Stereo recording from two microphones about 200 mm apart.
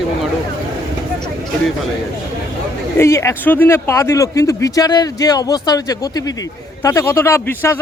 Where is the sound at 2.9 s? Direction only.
15° left (ahead or behind).